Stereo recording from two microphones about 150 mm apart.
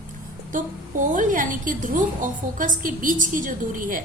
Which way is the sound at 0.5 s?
60° right (ahead or behind).